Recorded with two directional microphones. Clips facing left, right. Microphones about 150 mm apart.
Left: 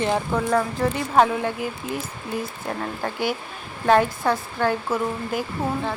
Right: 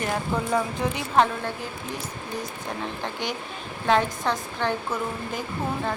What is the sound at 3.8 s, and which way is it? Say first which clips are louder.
Speech: left 4 dB; 10° left (ahead or behind).